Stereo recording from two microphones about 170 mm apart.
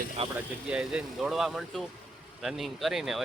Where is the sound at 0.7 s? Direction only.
5° right (ahead or behind).